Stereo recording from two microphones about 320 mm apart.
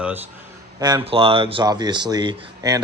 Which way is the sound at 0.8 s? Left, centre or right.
Centre.